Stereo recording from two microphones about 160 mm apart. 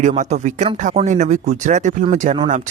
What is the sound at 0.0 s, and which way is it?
Speech, 50° right (ahead or behind).